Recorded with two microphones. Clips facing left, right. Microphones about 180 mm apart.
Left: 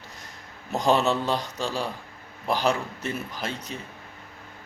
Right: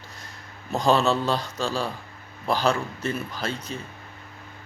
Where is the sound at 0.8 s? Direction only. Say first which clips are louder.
Right 1 dB; 20° left (ahead or behind).